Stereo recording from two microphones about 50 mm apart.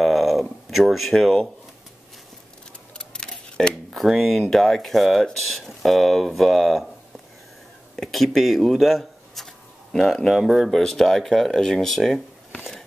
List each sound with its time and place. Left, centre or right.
0.0 s a sound: centre
3.0 s keys jangling: centre
3.9 s speech: centre
8.0 s speech: centre
10.7 s speech: centre